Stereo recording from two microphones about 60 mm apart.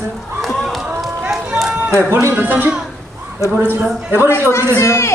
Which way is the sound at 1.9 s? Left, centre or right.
Right.